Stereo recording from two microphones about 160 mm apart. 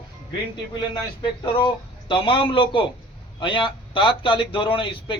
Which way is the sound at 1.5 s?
30° left (ahead or behind).